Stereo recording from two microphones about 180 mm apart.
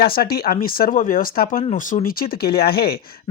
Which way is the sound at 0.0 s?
55° left (ahead or behind).